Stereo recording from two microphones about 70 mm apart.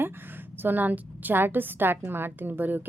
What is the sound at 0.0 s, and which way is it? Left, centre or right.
A woman's voice, right.